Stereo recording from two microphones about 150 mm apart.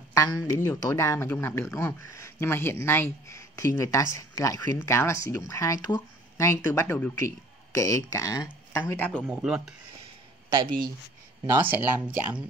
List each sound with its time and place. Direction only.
0.1 s speech: 20° left (ahead or behind)
8.8 s a man's voice: 10° left (ahead or behind)
9.3 s speech: 5° right (ahead or behind)
11.4 s speech: 15° right (ahead or behind)